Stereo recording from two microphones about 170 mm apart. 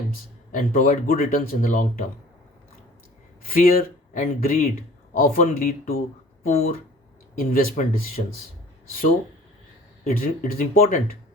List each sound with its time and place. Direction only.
0.5 s speech: 55° left (ahead or behind)
3.4 s speech: 60° left (ahead or behind)
10.0 s speech: 55° left (ahead or behind)